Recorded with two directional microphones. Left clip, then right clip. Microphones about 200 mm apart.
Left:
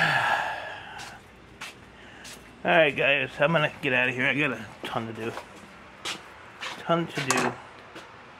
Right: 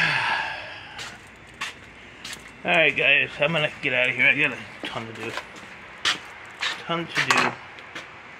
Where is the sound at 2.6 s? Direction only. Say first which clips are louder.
Right 1 dB; 20° left (ahead or behind).